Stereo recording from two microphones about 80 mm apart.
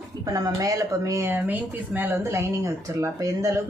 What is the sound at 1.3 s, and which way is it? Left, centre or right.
Speech, right.